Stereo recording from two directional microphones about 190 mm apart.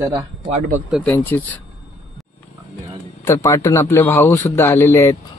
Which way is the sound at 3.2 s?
15° left (ahead or behind).